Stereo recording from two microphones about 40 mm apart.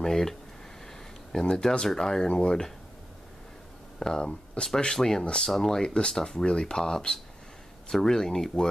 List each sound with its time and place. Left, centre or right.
0.0 s a sound: centre
1.3 s speech: centre
4.0 s speech: centre